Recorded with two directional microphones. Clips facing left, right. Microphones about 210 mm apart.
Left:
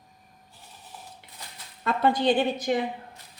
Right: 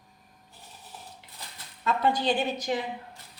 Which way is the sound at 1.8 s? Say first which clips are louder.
Left 3 dB; 55° left (ahead or behind).